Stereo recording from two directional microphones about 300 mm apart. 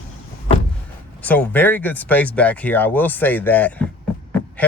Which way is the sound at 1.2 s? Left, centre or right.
Centre.